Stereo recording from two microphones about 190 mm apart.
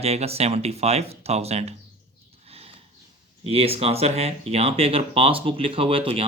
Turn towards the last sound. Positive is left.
turn(degrees=-30)  # may be behind; listen again after turning